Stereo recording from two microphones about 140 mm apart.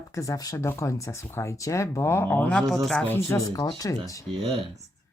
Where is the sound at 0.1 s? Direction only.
25° left (ahead or behind); by 3.1 s centre (ahead or behind).